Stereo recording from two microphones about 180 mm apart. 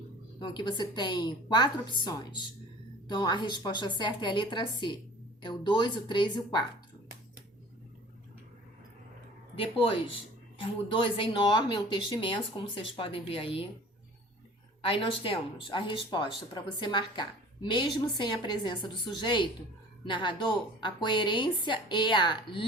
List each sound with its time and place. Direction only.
0.3 s speech: 25° left (ahead or behind)
9.6 s speech: 30° left (ahead or behind)
14.8 s speech: 30° left (ahead or behind)